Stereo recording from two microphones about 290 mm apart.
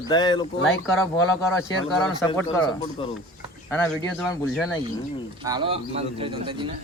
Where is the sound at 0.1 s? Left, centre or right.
Centre.